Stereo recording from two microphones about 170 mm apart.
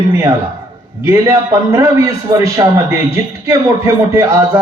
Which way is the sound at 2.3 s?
15° right (ahead or behind).